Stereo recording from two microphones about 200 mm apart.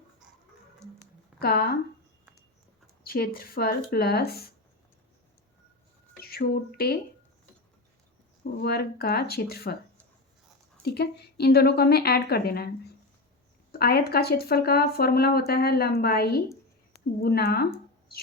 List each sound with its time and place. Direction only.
1.4 s speech: 50° left (ahead or behind)
3.1 s speech: 50° left (ahead or behind)
6.1 s speech: 50° left (ahead or behind)
8.6 s speech: 50° left (ahead or behind)
10.8 s speech: 55° left (ahead or behind)